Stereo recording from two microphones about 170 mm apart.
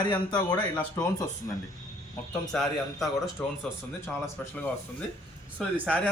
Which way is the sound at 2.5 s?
Centre (ahead or behind).